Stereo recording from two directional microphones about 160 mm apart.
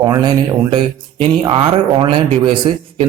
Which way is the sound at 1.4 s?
30° right (ahead or behind).